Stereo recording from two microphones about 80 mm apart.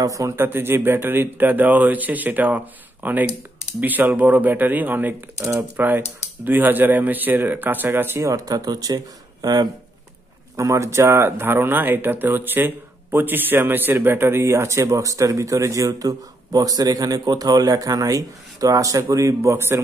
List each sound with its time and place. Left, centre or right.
0.0 s speech: right
0.4 s speech: right
10.5 s speech: right